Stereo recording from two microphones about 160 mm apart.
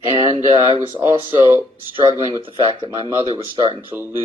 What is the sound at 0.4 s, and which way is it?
Speech, 35° right (ahead or behind).